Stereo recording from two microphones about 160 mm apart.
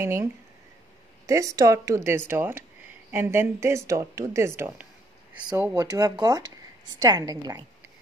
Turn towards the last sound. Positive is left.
turn(degrees=-20)  # may be behind; listen again after turning